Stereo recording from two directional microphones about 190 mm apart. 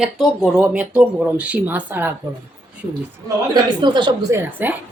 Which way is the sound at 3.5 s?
25° right (ahead or behind).